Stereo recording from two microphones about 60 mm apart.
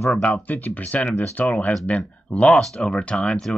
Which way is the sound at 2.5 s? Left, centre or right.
Centre.